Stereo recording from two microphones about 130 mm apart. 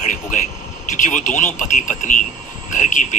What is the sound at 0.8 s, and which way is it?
Speech, 75° left (ahead or behind).